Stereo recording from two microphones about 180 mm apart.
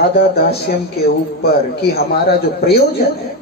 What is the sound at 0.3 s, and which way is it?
Speech, 60° left (ahead or behind).